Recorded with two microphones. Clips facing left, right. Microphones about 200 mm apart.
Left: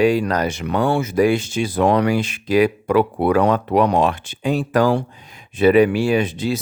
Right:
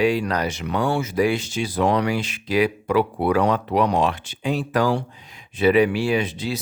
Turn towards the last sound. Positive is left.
turn(degrees=50)  # may be behind; listen again after turning